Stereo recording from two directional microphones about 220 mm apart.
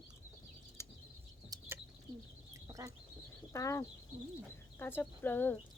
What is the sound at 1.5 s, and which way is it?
Bird, 15° right (ahead or behind).